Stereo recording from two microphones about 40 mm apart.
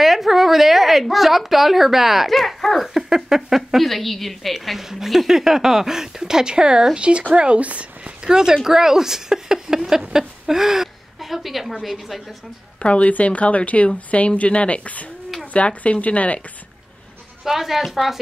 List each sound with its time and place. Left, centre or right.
0.0 s a woman's voice: centre
2.9 s speech: centre
4.6 s speech: centre; by 8.1 s right
8.3 s speech: centre
12.8 s speech: left
17.5 s speech: centre